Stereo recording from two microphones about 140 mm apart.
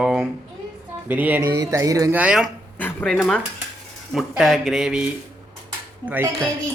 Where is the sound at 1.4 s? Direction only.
25° right (ahead or behind).